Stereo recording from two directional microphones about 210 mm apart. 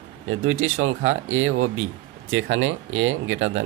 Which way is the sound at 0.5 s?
80° right.